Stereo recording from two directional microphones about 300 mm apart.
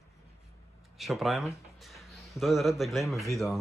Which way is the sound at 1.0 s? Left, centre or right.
Centre.